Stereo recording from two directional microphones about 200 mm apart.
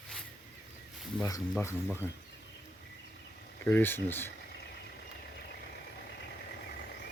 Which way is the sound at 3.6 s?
10° left (ahead or behind).